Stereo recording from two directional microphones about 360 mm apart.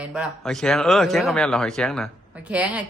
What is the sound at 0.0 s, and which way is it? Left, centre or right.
Speech, centre.